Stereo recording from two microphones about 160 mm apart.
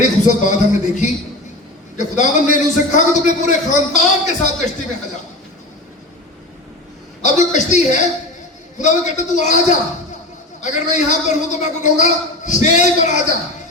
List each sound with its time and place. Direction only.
0.0 s a man's voice: 50° left (ahead or behind)
7.2 s a man's voice: 50° left (ahead or behind)